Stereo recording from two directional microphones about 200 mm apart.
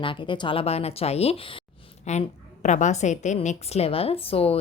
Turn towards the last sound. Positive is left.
turn(degrees=30)  # may be behind; listen again after turning